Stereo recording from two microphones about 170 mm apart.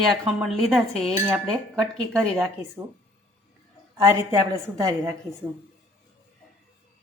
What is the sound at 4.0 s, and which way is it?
A woman's voice, 20° right (ahead or behind).